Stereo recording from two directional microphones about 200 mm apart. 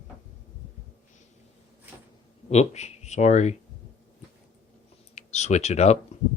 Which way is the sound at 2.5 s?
35° left (ahead or behind).